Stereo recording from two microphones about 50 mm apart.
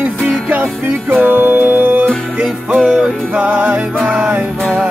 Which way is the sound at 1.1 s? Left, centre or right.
Right.